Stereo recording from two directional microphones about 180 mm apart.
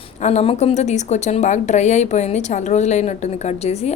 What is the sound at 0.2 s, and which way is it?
Speech, 40° left (ahead or behind).